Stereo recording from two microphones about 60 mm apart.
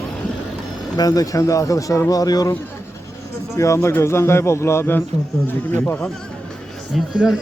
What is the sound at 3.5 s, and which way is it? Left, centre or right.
A man's voice, left.